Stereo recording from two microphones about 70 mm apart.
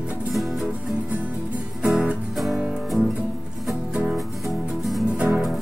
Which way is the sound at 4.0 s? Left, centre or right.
Centre.